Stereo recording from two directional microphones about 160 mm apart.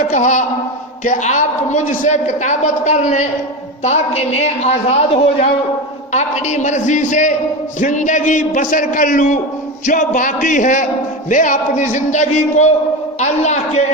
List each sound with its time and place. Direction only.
0.0 s a man's voice: 50° left (ahead or behind)